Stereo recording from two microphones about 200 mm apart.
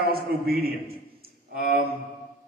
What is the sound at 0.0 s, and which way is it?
A man's voice, 50° right (ahead or behind).